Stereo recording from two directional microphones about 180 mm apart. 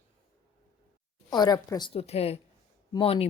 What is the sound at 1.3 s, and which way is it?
Speech, 25° left (ahead or behind).